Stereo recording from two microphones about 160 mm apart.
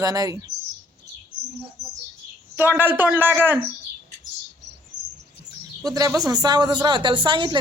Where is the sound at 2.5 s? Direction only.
15° right (ahead or behind).